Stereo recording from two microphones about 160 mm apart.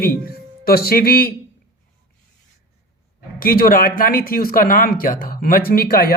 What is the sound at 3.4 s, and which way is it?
Speech, 65° left (ahead or behind).